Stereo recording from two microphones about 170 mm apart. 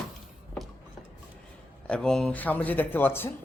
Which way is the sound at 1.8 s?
5° left (ahead or behind).